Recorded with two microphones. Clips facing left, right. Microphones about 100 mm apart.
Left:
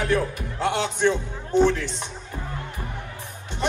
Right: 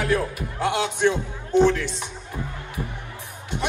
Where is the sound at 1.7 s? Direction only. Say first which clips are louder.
Right 2 dB; 20° left (ahead or behind).